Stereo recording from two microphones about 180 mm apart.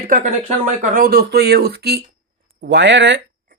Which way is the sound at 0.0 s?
45° right (ahead or behind).